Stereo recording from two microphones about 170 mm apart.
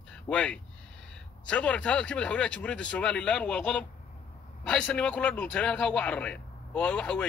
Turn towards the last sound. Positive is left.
turn(degrees=5)  # may be behind; listen again after turning